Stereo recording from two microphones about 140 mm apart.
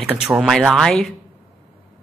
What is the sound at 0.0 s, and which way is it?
Speech, 5° right (ahead or behind).